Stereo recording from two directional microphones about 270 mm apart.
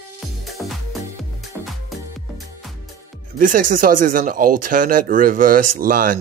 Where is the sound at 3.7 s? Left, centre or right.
Right.